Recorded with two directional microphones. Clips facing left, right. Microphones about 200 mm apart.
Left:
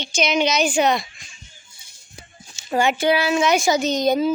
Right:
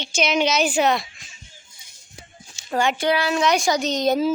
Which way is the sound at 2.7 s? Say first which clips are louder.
Left 2 dB; 10° left (ahead or behind).